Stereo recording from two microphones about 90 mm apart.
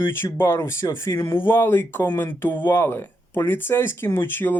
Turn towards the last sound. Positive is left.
turn(degrees=25)  # may be behind; listen again after turning